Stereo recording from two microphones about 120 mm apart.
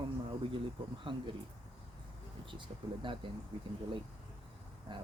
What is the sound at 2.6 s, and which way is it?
Speech, 45° right (ahead or behind).